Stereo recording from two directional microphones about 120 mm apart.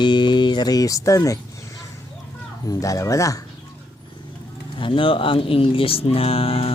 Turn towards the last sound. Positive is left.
turn(degrees=55)  # may be behind; listen again after turning